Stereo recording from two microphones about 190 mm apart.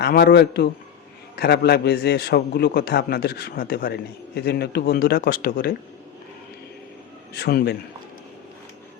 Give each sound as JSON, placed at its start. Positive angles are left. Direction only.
{"t": 0.0, "sound": "a man's voice", "side_deg": 55}
{"t": 7.3, "sound": "a man's voice", "side_deg": 55}